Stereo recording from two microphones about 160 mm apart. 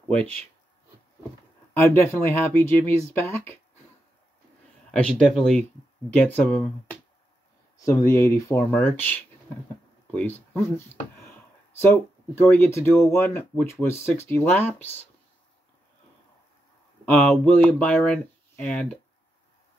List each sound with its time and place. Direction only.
1.7 s speech: 15° left (ahead or behind)
4.9 s speech: 5° left (ahead or behind)
7.7 s speech: 20° left (ahead or behind)
12.4 s speech: 15° left (ahead or behind)
17.0 s speech: 5° left (ahead or behind)